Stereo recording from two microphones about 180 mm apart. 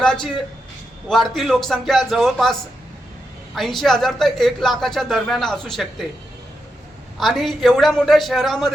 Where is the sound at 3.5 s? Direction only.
Centre (ahead or behind).